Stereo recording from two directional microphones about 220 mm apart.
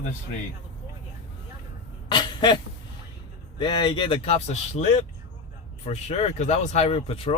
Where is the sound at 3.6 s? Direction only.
20° left (ahead or behind).